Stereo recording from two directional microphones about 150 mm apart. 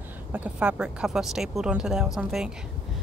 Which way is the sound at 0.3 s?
10° right (ahead or behind).